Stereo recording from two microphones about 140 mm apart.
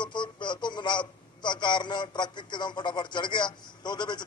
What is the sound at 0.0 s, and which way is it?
A man's voice, 35° left (ahead or behind).